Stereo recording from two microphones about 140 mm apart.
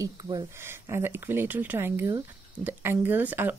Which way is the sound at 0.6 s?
20° right (ahead or behind).